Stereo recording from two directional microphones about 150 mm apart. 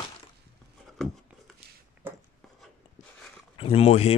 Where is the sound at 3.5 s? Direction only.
40° left (ahead or behind).